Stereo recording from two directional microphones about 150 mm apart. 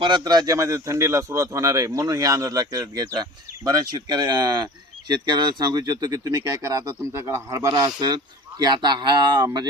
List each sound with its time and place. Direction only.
0.0 s a man's voice: 30° right (ahead or behind)